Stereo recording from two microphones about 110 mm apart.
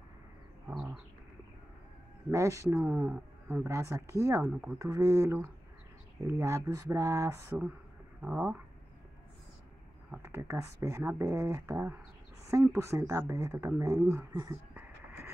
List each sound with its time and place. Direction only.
0.7 s a sound: 15° right (ahead or behind)
2.3 s speech: 30° right (ahead or behind)
2.8 s speech: 10° right (ahead or behind)
3.6 s speech: 25° right (ahead or behind)
4.5 s speech: 10° right (ahead or behind)
4.7 s speech: 30° right (ahead or behind)
10.2 s speech: 25° right (ahead or behind)
14.7 s a sound: 15° right (ahead or behind)